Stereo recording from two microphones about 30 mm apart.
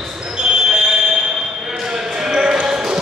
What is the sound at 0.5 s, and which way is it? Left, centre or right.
Fire alarm, centre.